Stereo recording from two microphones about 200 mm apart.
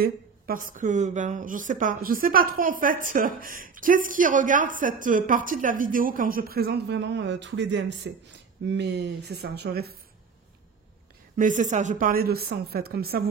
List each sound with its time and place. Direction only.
0.0 s speech: 45° right (ahead or behind)
11.3 s speech: 40° right (ahead or behind)